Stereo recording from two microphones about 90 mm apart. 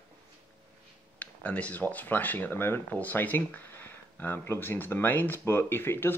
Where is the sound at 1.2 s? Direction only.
15° left (ahead or behind).